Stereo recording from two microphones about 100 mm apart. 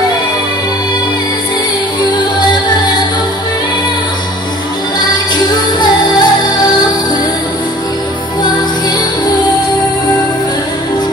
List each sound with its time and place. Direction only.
5.5 s music: 45° left (ahead or behind)